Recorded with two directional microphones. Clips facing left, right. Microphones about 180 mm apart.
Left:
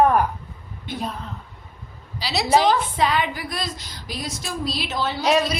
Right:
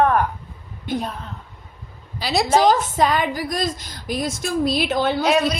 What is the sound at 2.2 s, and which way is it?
A woman's voice, 50° right (ahead or behind).